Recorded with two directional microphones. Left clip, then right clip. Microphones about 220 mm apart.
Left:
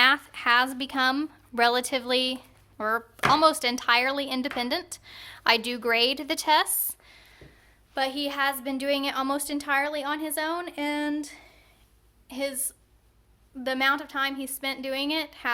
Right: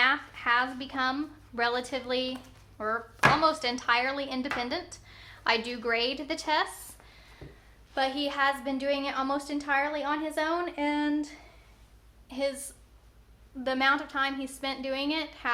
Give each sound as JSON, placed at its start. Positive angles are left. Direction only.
{"t": 0.0, "sound": "a woman's voice", "side_deg": 45}
{"t": 7.1, "sound": "a sound", "side_deg": 40}
{"t": 7.9, "sound": "a woman's voice", "side_deg": 40}